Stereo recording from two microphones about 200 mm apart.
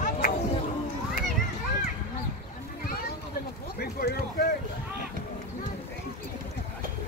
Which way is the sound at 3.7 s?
50° left (ahead or behind).